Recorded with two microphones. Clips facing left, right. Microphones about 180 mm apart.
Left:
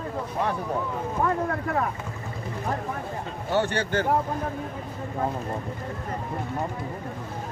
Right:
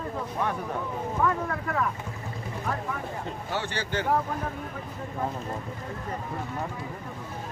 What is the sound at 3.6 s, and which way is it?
Speech, 60° left (ahead or behind).